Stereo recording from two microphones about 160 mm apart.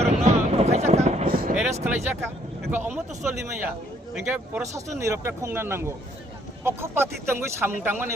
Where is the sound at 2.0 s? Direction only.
15° right (ahead or behind).